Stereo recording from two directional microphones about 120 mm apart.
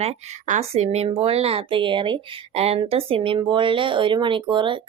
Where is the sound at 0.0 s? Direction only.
65° right (ahead or behind).